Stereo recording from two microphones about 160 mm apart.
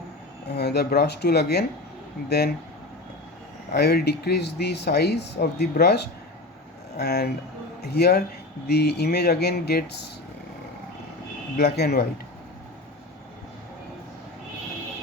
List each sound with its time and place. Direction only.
0.5 s speech: 90° left
3.7 s speech: 75° left (ahead or behind)
7.9 s speech: 90° left
11.5 s speech: 85° left